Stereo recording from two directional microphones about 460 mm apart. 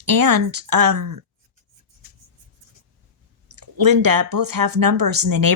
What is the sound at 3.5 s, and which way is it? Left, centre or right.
Speech, right.